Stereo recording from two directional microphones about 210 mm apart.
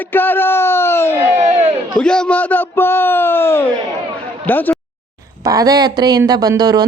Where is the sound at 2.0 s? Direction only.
5° left (ahead or behind).